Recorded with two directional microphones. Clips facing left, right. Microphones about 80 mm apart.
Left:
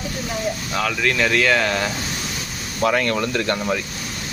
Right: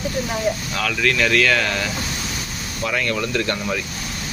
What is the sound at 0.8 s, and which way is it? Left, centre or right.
Speech, left.